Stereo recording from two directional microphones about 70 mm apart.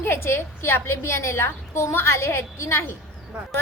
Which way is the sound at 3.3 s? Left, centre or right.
Centre.